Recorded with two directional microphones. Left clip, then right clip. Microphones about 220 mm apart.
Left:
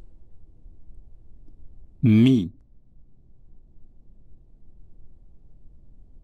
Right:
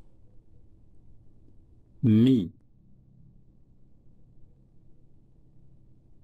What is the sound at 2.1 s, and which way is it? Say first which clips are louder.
Speech: left 3 dB; 50° left (ahead or behind).